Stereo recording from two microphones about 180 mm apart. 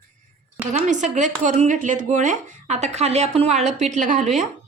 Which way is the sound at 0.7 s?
40° right (ahead or behind).